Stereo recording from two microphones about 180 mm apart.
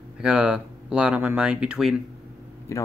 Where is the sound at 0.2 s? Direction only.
5° right (ahead or behind).